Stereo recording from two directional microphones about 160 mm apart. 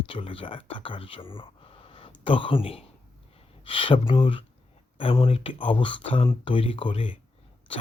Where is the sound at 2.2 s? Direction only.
35° left (ahead or behind).